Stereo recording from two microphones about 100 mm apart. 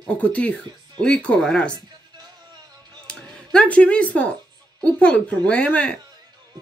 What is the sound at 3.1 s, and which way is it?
Speech, 10° left (ahead or behind).